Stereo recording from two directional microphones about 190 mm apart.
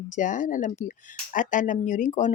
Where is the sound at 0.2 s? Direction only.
45° left (ahead or behind).